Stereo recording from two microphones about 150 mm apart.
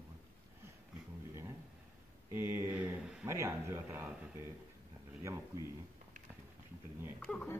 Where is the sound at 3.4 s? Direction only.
15° right (ahead or behind).